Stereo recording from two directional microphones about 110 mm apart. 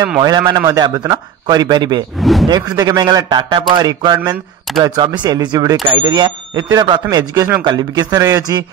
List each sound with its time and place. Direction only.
0.2 s a man's voice: 40° right (ahead or behind)
3.3 s a man's voice: 45° right (ahead or behind)
7.3 s speech: 25° right (ahead or behind)
7.6 s a man's voice: 40° right (ahead or behind)